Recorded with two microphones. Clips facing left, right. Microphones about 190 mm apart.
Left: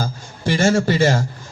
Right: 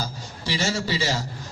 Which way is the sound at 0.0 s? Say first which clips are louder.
Left 7 dB; 50° left (ahead or behind).